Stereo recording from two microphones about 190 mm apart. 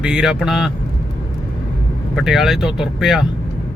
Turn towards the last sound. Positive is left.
turn(degrees=0)  # may be behind; listen again after turning